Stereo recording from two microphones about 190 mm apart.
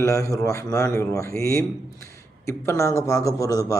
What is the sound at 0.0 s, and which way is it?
A man's voice, 15° left (ahead or behind).